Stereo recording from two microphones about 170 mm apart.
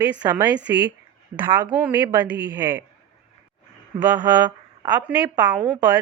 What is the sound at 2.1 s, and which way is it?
Speech, 10° right (ahead or behind).